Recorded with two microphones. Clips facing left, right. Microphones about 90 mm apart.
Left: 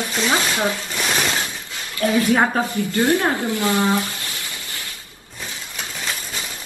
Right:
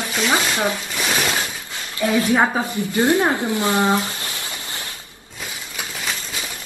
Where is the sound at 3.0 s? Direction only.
20° right (ahead or behind).